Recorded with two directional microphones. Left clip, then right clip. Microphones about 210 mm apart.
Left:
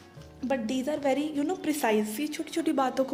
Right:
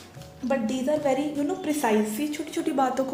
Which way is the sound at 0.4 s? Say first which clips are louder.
Right 4 dB; 55° left (ahead or behind).